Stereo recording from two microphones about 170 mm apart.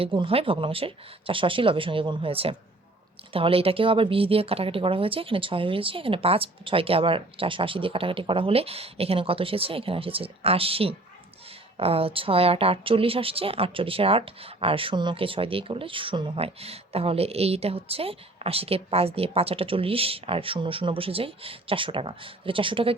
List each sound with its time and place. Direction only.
0.0 s speech: 30° right (ahead or behind)